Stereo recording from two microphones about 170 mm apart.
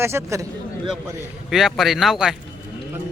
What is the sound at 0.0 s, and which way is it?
Speech, 15° right (ahead or behind).